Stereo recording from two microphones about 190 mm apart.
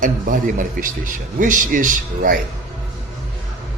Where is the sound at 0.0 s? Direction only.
45° right (ahead or behind).